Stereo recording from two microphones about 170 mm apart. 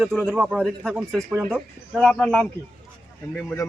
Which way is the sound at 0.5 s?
5° left (ahead or behind).